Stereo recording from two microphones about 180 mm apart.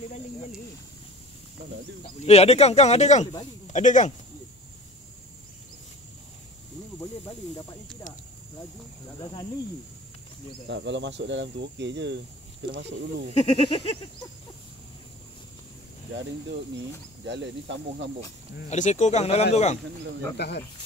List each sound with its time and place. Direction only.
2.0 s speech: 35° left (ahead or behind)
9.2 s cricket: 25° left (ahead or behind)
10.7 s speech: 85° right
13.3 s speech: 35° left (ahead or behind)
17.3 s speech: 80° right
18.7 s speech: 40° left (ahead or behind)
20.3 s speech: 70° left (ahead or behind)